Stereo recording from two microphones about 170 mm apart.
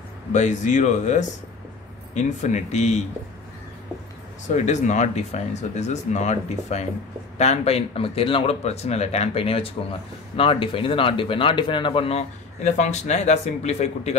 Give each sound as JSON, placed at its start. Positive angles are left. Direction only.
{"t": 0.3, "sound": "speech", "side_deg": 45}
{"t": 4.5, "sound": "speech", "side_deg": 45}